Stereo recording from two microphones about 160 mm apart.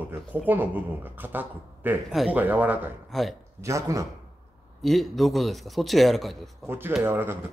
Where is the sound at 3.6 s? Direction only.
20° right (ahead or behind).